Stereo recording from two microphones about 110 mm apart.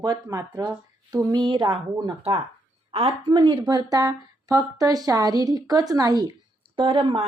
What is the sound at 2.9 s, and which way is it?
Speech, 60° right (ahead or behind).